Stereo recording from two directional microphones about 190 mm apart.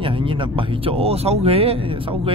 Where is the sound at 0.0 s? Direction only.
25° right (ahead or behind).